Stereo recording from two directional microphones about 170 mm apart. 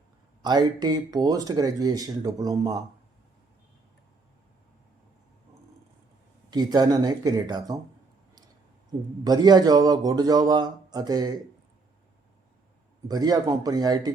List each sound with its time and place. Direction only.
0.4 s a man's voice: 25° right (ahead or behind)
6.5 s a man's voice: 25° right (ahead or behind)
8.9 s a man's voice: 25° right (ahead or behind)
13.1 s a man's voice: 25° right (ahead or behind)